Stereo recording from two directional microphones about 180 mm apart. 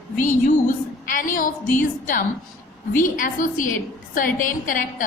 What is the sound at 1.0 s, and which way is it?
A woman's voice, 45° left (ahead or behind).